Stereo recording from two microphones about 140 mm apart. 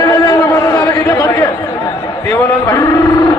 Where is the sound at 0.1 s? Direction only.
25° left (ahead or behind).